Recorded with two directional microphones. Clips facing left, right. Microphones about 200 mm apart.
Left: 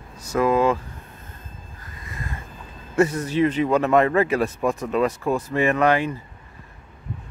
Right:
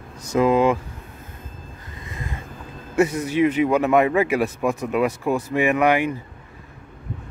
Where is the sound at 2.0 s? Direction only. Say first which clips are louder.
Right 1 dB; 20° right (ahead or behind).